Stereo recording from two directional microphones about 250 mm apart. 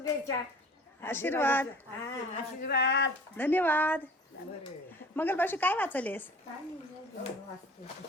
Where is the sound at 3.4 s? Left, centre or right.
Centre.